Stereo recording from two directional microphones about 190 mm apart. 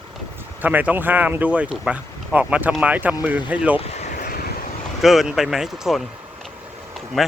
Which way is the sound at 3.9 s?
40° left (ahead or behind).